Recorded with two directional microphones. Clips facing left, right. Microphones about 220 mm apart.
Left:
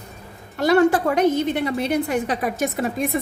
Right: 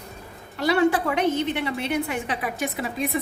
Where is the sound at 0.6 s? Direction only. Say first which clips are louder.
Left 4 dB; 45° left (ahead or behind).